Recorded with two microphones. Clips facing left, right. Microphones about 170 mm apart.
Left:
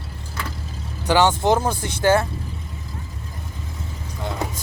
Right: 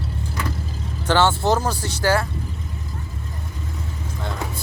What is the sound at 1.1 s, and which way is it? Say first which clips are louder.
Speech: left 1 dB; 15° left (ahead or behind).